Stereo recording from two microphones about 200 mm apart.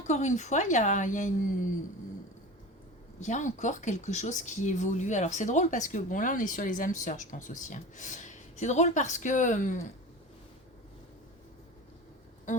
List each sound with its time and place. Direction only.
0.1 s speech: 35° left (ahead or behind)
3.2 s speech: 35° left (ahead or behind)
12.5 s music: 40° left (ahead or behind)